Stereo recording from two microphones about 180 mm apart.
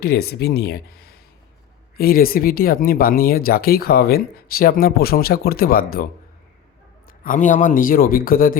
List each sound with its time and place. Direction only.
0.0 s speech: 60° left (ahead or behind)
2.0 s speech: 55° left (ahead or behind)
7.3 s speech: 45° left (ahead or behind)